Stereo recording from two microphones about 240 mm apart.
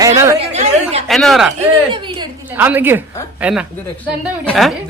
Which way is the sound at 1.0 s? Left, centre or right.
Centre.